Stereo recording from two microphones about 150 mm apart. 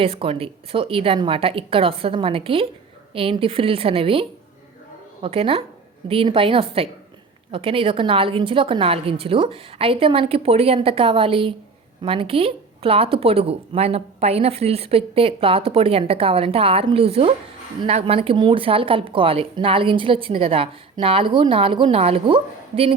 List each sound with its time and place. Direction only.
0.0 s speech: 40° right (ahead or behind)